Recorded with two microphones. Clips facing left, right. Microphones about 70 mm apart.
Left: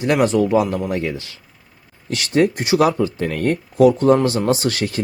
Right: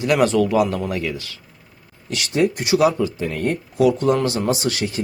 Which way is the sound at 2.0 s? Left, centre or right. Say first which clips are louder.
Left 3 dB; left.